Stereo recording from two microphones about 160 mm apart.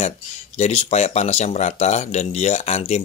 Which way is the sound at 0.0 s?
45° left (ahead or behind).